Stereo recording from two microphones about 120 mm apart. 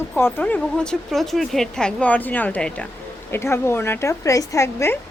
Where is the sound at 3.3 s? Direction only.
20° left (ahead or behind).